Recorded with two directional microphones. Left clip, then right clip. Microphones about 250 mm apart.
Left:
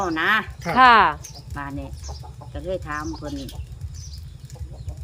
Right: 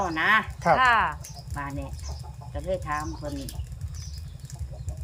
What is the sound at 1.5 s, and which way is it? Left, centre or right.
A woman's voice, centre.